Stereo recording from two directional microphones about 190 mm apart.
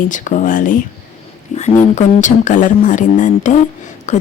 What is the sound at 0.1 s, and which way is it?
Speech, 45° left (ahead or behind).